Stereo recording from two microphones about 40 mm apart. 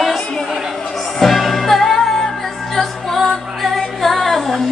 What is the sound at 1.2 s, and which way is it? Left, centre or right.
Music, centre.